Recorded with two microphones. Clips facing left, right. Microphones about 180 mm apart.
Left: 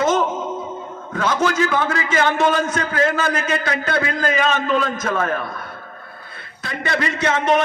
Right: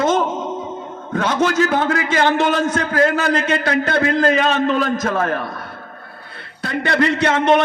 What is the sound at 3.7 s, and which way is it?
Speech, 50° right (ahead or behind).